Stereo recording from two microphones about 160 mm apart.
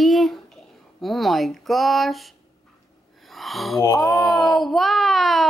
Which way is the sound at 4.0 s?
Centre (ahead or behind).